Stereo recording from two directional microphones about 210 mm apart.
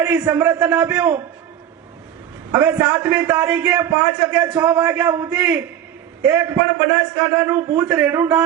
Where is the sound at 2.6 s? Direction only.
5° right (ahead or behind).